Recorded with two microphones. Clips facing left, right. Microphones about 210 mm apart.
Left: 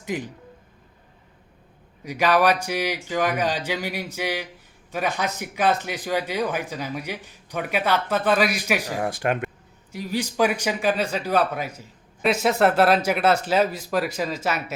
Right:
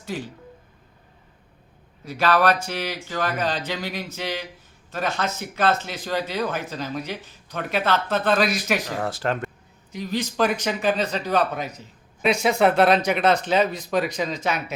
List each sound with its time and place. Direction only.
0.0 s speech: 15° left (ahead or behind)
2.0 s speech: 15° left (ahead or behind)